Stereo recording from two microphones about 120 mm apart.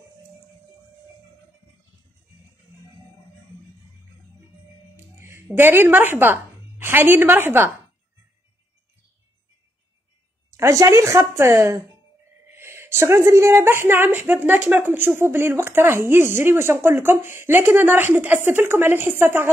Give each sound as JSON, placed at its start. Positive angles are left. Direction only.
{"t": 4.9, "sound": "speech", "side_deg": -20}
{"t": 10.5, "sound": "a woman's voice", "side_deg": -25}